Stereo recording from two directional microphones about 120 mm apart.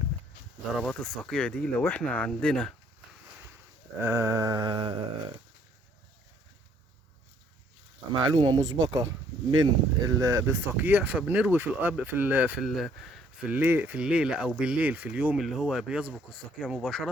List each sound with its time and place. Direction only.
0.8 s speech: centre (ahead or behind)
4.0 s mantra: 20° right (ahead or behind); by 5.0 s 45° right (ahead or behind)
8.2 s mantra: 35° right (ahead or behind)
9.5 s speech: 35° right (ahead or behind); by 12.6 s 10° right (ahead or behind)
12.6 s speech: centre (ahead or behind)
13.5 s speech: 15° right (ahead or behind); by 17.1 s centre (ahead or behind)